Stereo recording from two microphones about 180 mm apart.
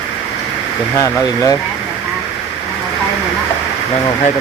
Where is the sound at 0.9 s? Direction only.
20° left (ahead or behind).